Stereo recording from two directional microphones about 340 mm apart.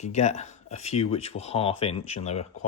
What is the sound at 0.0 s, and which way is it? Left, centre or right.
Speech, centre.